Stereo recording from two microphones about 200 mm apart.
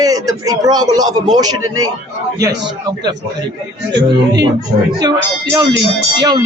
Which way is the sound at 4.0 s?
60° right (ahead or behind).